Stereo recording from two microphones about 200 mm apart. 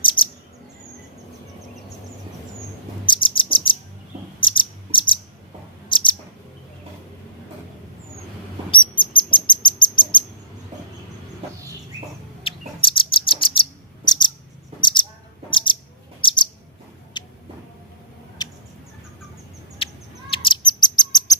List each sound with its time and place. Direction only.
0.0 s bird: 25° left (ahead or behind)
3.1 s chirp: 25° left (ahead or behind)
4.4 s cricket: 25° left (ahead or behind)
8.7 s bird: 25° left (ahead or behind)
12.4 s bird: 25° left (ahead or behind)
14.8 s cricket: 25° left (ahead or behind)
15.4 s bird: 25° left (ahead or behind)
17.2 s rodents: 20° left (ahead or behind)
18.4 s rodents: 20° left (ahead or behind)
20.3 s bird: 25° left (ahead or behind)